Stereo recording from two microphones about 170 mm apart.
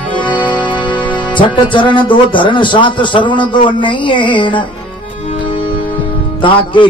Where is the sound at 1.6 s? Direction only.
30° left (ahead or behind).